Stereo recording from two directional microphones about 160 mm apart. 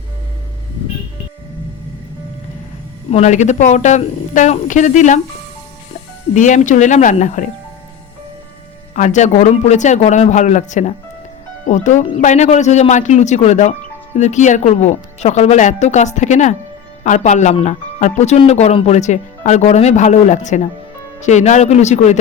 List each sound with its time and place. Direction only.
3.1 s speech: 45° left (ahead or behind)
6.3 s speech: 50° left (ahead or behind)
9.0 s speech: 50° left (ahead or behind)